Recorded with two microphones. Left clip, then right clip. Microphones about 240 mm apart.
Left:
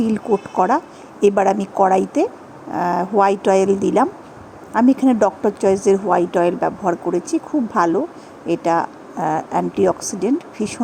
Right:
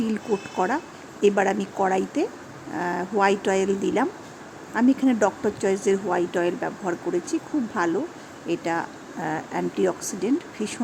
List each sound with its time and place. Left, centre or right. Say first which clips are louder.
0.0 s a woman's voice: left 7 dB; centre